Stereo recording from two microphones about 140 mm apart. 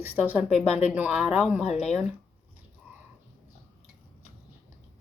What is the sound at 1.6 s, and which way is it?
Speech, 50° left (ahead or behind).